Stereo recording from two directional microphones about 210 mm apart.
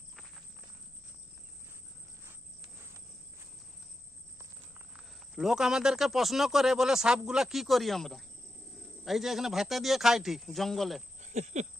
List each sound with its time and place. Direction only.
2.2 s cricket: 15° right (ahead or behind)
4.9 s speech: 5° right (ahead or behind)
11.2 s a sound: 35° right (ahead or behind)